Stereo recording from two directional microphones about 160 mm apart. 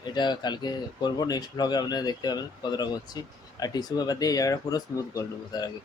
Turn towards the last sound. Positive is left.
turn(degrees=20)  # may be behind; listen again after turning